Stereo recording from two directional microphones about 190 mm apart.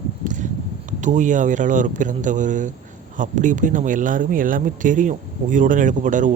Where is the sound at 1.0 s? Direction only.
40° right (ahead or behind).